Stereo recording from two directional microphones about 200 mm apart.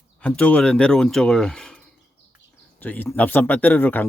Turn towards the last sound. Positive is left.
turn(degrees=10)  # may be behind; listen again after turning